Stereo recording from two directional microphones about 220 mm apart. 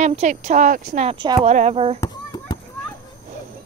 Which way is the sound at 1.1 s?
20° right (ahead or behind).